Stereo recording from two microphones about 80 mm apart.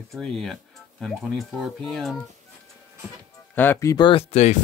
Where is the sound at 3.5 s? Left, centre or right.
Left.